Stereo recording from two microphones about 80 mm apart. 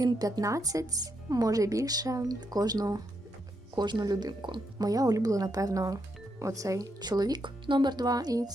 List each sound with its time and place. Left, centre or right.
0.0 s speech: right
3.8 s speech: right
4.9 s speech: right